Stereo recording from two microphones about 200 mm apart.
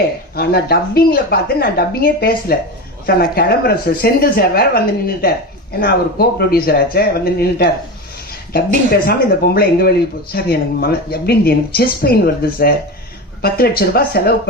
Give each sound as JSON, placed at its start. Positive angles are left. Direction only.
{"t": 0.3, "sound": "speech", "side_deg": 50}
{"t": 9.0, "sound": "speech", "side_deg": 50}